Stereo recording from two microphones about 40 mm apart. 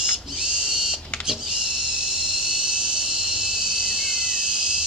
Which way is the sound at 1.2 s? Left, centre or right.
Centre.